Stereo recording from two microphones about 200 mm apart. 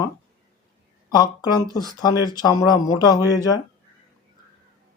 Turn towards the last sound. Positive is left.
turn(degrees=20)  # may be behind; listen again after turning